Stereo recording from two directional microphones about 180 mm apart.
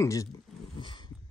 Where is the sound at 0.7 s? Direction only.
25° left (ahead or behind).